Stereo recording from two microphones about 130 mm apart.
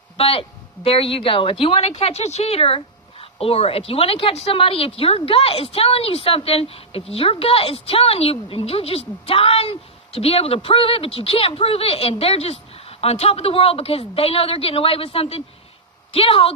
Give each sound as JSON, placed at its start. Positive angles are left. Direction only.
{"t": 0.2, "sound": "a woman's voice", "side_deg": 45}